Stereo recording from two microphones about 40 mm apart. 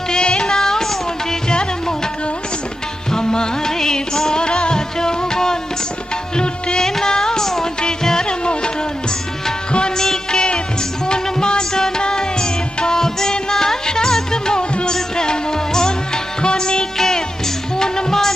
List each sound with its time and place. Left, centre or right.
0.1 s music: left
3.1 s music: centre
10.3 s music: left